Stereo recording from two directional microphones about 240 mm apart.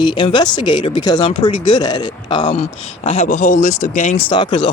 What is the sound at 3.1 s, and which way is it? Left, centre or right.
Speech, left.